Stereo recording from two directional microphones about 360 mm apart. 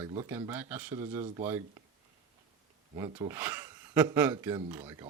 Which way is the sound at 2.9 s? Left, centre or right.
Centre.